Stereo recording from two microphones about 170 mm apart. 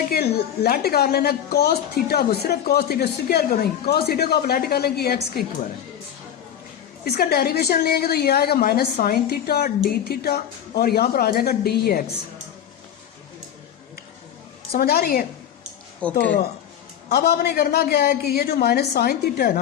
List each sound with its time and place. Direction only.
0.1 s a woman's voice: 65° left (ahead or behind)
7.0 s a woman's voice: 65° left (ahead or behind)
14.7 s a woman's voice: 65° left (ahead or behind)
16.1 s speech: 85° left
17.1 s a woman's voice: 70° left (ahead or behind)